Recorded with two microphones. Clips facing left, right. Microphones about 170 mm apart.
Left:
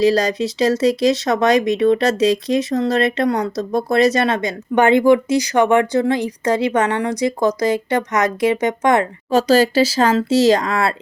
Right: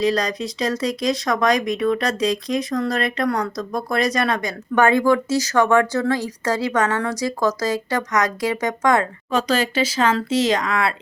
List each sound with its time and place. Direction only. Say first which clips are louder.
0.0 s speech: left 5 dB; 30° left (ahead or behind)
9.3 s speech: left 7 dB; 35° left (ahead or behind)